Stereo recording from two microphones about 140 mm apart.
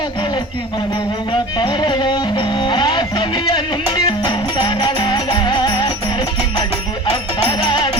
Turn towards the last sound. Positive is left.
turn(degrees=35)  # may be behind; listen again after turning